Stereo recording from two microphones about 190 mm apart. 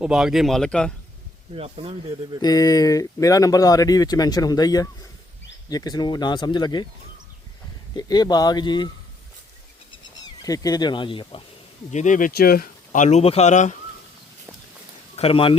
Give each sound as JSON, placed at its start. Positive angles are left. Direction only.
{"t": 0.0, "sound": "speech", "side_deg": -5}
{"t": 1.5, "sound": "speech", "side_deg": -35}
{"t": 2.4, "sound": "speech", "side_deg": 20}
{"t": 7.9, "sound": "speech", "side_deg": 20}
{"t": 10.2, "sound": "speech", "side_deg": 20}
{"t": 11.9, "sound": "speech", "side_deg": 40}
{"t": 15.1, "sound": "speech", "side_deg": 30}